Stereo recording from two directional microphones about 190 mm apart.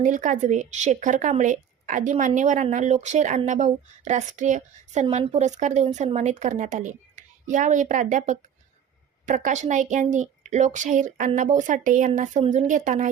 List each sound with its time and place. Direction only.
0.0 s speech: 40° right (ahead or behind)